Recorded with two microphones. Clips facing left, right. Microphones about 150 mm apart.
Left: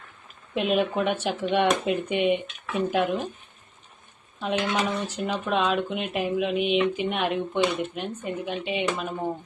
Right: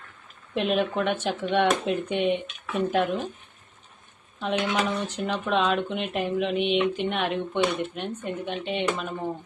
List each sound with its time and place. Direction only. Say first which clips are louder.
0.5 s speech: left 1 dB; 5° left (ahead or behind)
4.4 s speech: even; 5° left (ahead or behind)